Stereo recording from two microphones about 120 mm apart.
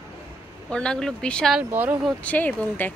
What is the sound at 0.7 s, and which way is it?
Speech, 5° left (ahead or behind).